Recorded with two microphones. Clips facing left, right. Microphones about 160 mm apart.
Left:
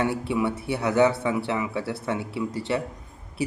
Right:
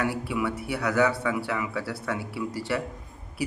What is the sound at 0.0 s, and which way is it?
A man's voice, 25° left (ahead or behind).